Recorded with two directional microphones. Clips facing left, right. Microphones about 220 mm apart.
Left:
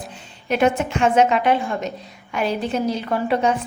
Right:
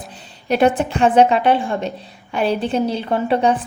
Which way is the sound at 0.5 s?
35° right (ahead or behind).